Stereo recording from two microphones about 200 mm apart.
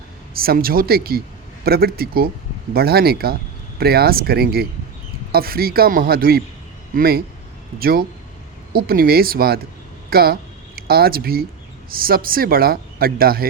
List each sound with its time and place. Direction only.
0.3 s speech: 50° right (ahead or behind)